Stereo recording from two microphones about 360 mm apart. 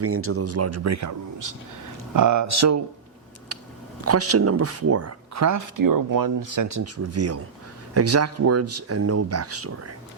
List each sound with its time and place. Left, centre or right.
0.0 s speech: right
3.5 s a sound: right
4.0 s speech: right